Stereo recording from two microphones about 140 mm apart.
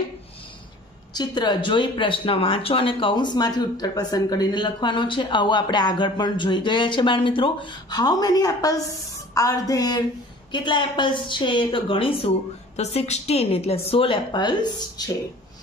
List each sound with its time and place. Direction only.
1.1 s a woman's voice: 30° left (ahead or behind)
12.7 s a woman's voice: 50° left (ahead or behind); by 15.1 s 30° left (ahead or behind)